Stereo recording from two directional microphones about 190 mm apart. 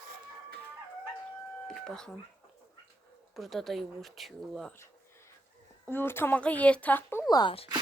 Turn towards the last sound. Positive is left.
turn(degrees=25)  # may be behind; listen again after turning